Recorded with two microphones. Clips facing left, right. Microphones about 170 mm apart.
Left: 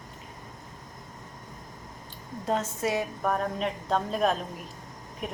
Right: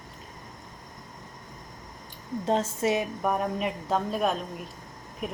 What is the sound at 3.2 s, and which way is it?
Speech, 10° right (ahead or behind).